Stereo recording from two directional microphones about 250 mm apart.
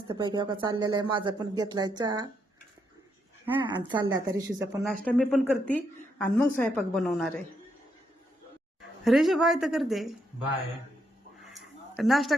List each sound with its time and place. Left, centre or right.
0.1 s speech: centre
3.6 s speech: centre
4.9 s a woman's voice: centre
9.0 s a woman's voice: centre
11.4 s a sound: centre